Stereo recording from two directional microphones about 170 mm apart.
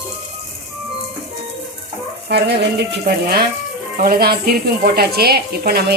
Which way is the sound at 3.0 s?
65° right (ahead or behind).